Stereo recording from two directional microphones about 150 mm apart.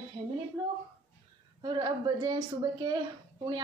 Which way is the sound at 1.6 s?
30° right (ahead or behind).